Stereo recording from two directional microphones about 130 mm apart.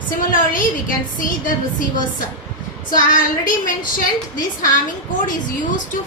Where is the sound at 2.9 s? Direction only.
90° left.